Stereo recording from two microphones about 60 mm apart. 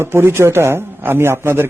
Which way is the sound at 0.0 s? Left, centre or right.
Right.